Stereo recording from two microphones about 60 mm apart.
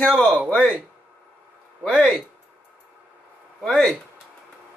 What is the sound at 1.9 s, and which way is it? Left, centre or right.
Speech, centre.